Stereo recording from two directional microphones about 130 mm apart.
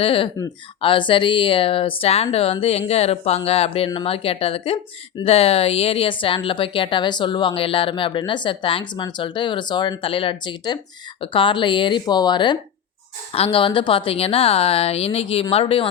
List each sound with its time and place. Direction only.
0.0 s speech: 45° left (ahead or behind)
13.3 s speech: 45° left (ahead or behind)